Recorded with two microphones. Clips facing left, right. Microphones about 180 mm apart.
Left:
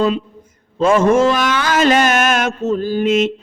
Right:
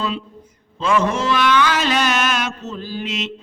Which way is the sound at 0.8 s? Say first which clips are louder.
Left 7 dB; 45° left (ahead or behind).